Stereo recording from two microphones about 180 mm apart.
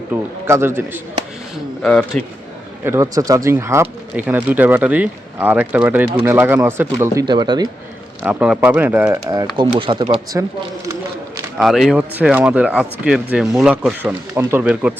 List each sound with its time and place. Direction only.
0.1 s speech: 15° right (ahead or behind)
1.8 s speech: 5° left (ahead or behind)
2.8 s speech: 15° right (ahead or behind)
7.3 s speech: 25° right (ahead or behind)
8.2 s speech: 5° right (ahead or behind); by 10.2 s 30° right (ahead or behind)
11.5 s speech: centre (ahead or behind)